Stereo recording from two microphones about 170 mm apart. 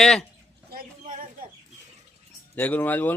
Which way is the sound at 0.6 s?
55° right (ahead or behind).